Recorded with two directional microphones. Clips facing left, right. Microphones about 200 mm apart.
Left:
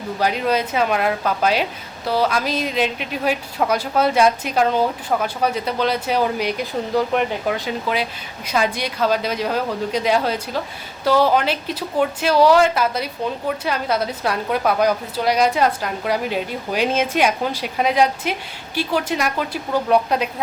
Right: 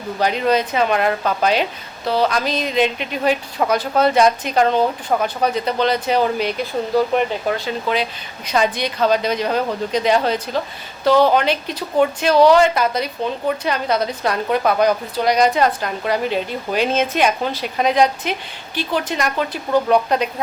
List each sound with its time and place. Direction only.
0.2 s speech: 5° left (ahead or behind)